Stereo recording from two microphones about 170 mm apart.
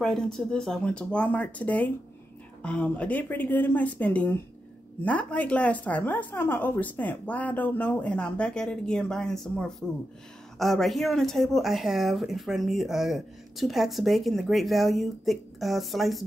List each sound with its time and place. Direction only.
0.0 s a woman's voice: centre (ahead or behind)